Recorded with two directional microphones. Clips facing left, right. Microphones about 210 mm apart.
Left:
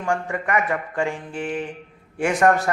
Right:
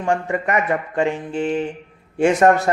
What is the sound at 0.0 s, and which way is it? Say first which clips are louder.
Speech: right 4 dB; 25° right (ahead or behind).